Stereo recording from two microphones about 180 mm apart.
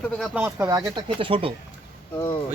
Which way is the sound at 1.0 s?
30° right (ahead or behind).